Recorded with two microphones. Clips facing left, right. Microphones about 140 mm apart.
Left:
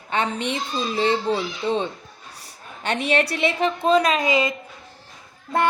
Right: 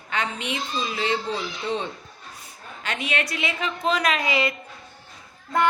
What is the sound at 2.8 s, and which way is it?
A woman's voice, 35° left (ahead or behind).